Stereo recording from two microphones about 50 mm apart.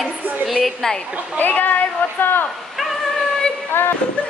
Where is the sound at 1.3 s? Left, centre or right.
Left.